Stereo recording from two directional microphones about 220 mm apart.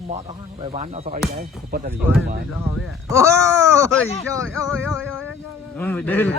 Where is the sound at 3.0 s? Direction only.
15° right (ahead or behind).